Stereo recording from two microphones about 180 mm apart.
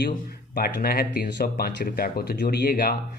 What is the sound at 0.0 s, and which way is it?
Speech, 55° left (ahead or behind).